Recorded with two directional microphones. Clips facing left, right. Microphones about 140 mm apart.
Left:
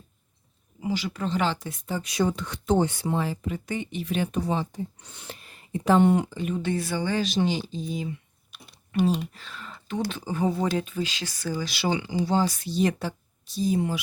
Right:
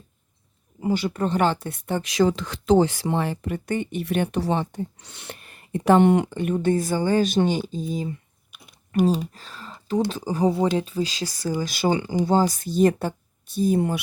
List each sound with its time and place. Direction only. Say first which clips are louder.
0.8 s speech: right 5 dB; 50° right (ahead or behind)